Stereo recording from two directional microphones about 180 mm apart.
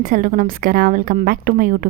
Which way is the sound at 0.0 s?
50° right (ahead or behind).